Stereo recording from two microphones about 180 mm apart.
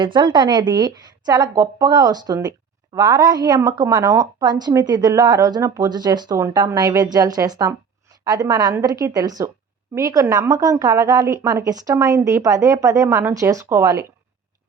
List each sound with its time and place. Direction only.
0.0 s a woman's voice: 25° right (ahead or behind)